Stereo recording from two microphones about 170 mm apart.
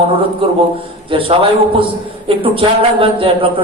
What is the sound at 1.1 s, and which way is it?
A man's voice, 35° right (ahead or behind).